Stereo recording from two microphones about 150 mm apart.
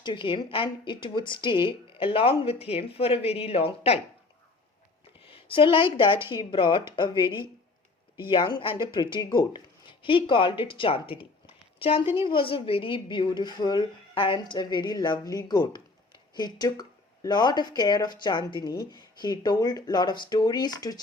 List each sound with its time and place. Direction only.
0.0 s speech: 30° left (ahead or behind)
5.2 s a woman's voice: 35° left (ahead or behind)